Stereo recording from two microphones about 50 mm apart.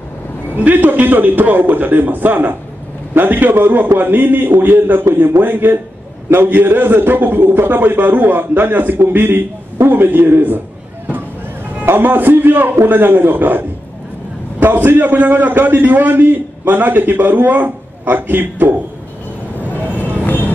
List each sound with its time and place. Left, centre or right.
0.6 s a man's voice: right
12.0 s a man's voice: right
14.9 s a man's voice: right